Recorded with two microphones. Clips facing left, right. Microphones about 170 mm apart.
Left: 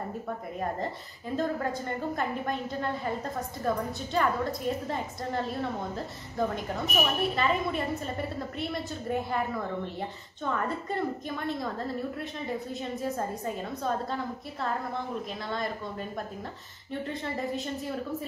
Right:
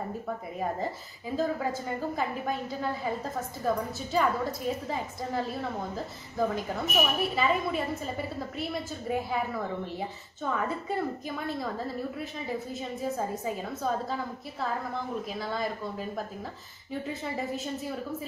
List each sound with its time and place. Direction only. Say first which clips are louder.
0.6 s a woman's voice: right 1 dB; 5° right (ahead or behind)